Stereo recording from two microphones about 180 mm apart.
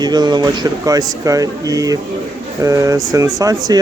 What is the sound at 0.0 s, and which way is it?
Speech, 25° right (ahead or behind).